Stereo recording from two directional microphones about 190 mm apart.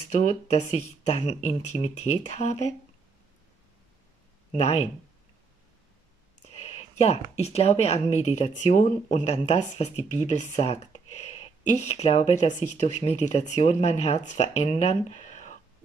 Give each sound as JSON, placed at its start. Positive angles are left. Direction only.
{"t": 0.1, "sound": "speech", "side_deg": 35}
{"t": 4.6, "sound": "speech", "side_deg": 35}
{"t": 6.6, "sound": "speech", "side_deg": 35}